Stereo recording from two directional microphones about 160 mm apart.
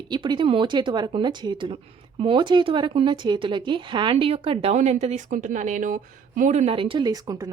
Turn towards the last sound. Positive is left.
turn(degrees=-25)  # may be behind; listen again after turning